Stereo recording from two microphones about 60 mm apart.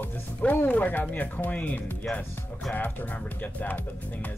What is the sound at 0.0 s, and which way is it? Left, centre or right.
Speech, left.